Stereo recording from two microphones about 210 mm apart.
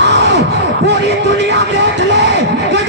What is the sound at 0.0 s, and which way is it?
Music, 55° right (ahead or behind).